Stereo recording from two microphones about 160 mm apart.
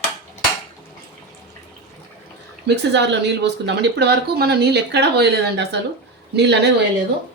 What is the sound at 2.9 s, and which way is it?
Speech, 90° right.